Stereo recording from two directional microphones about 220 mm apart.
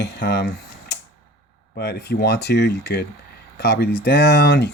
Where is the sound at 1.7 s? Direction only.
45° left (ahead or behind).